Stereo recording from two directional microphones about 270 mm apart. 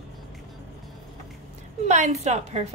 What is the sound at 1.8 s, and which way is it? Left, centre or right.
Speech, right.